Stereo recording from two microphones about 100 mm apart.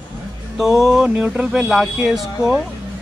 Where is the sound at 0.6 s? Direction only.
Centre (ahead or behind).